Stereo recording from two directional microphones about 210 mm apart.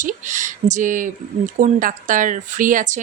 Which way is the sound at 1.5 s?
35° right (ahead or behind).